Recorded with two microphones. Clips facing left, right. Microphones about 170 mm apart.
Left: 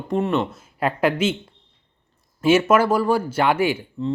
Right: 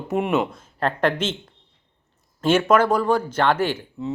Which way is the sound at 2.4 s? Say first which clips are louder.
Left 1 dB; 10° left (ahead or behind).